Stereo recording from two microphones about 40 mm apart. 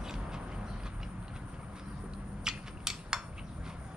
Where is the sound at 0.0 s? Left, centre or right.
Centre.